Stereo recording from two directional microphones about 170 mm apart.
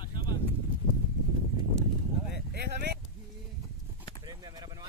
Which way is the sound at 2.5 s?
70° right (ahead or behind).